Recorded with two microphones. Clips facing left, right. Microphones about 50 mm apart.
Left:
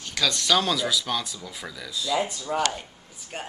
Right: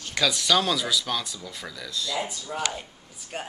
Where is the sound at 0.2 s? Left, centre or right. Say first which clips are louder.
Even; centre.